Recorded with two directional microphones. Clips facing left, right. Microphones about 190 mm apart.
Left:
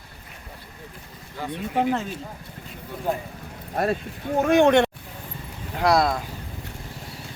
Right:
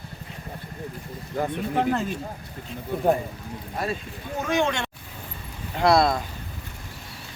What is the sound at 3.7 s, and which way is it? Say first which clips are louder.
Speech: left 6 dB; 55° left (ahead or behind).